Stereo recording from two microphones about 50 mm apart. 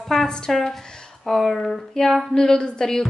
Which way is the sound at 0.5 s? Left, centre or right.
Centre.